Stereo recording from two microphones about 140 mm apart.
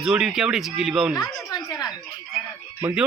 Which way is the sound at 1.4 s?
25° left (ahead or behind).